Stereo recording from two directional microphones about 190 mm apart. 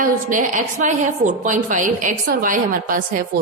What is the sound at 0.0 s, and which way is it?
A woman's voice, 45° right (ahead or behind).